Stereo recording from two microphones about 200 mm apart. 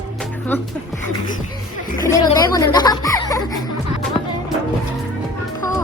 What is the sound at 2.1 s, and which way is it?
Music, 15° left (ahead or behind).